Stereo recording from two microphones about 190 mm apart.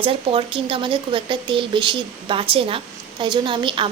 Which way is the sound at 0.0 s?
30° right (ahead or behind).